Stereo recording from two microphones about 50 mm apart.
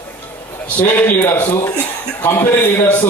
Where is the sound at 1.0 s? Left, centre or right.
Left.